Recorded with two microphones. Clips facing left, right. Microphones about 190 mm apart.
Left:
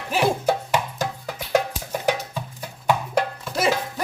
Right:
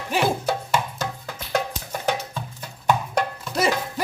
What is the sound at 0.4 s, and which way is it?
Music, 15° left (ahead or behind).